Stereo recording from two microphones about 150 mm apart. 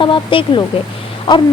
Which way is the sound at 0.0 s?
35° left (ahead or behind).